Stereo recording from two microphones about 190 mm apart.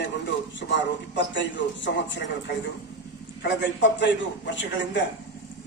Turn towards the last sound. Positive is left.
turn(degrees=75)  # may be behind; listen again after turning